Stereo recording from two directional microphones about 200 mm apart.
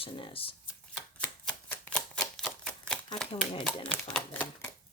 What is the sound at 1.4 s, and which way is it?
Typewriter, 5° left (ahead or behind).